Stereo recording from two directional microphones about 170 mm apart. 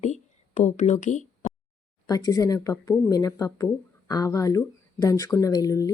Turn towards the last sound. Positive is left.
turn(degrees=20)  # may be behind; listen again after turning